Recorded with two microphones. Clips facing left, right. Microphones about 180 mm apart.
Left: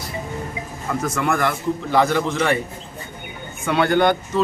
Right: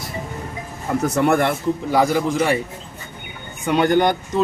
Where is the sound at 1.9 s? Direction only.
10° right (ahead or behind).